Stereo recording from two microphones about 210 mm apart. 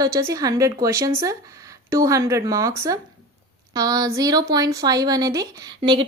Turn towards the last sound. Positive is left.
turn(degrees=-25)  # may be behind; listen again after turning